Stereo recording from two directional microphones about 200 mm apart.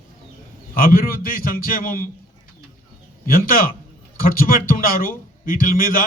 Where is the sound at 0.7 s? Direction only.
45° left (ahead or behind).